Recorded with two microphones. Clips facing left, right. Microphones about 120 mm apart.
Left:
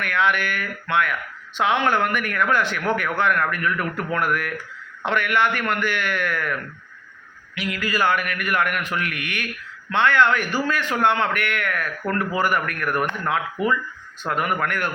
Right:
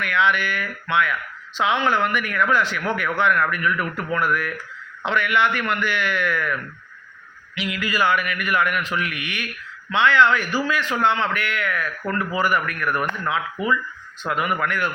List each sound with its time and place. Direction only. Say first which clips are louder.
0.0 s a man's voice: right 1 dB; 50° left (ahead or behind)
7.5 s a man's voice: even; 45° left (ahead or behind)
13.6 s speech: left 1 dB; centre (ahead or behind)
14.3 s a man's voice: even; 50° left (ahead or behind)